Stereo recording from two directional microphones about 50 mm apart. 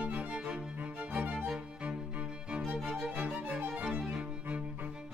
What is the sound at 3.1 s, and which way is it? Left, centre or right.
Music, right.